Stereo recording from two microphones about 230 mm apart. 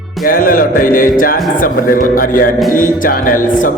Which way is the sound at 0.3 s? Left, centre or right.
Left.